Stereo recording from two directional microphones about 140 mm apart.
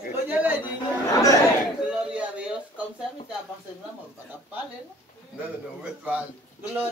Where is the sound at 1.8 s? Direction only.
10° right (ahead or behind).